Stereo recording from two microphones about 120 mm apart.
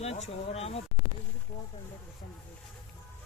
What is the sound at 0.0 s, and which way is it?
Speech, 60° left (ahead or behind).